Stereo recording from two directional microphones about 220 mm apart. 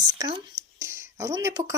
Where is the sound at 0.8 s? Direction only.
10° right (ahead or behind).